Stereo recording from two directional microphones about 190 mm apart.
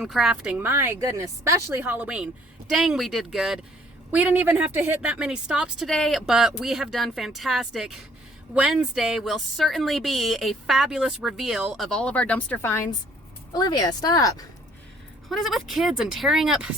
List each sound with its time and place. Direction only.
0.0 s a woman's voice: centre (ahead or behind); by 14.4 s 20° left (ahead or behind)
15.3 s a woman's voice: centre (ahead or behind)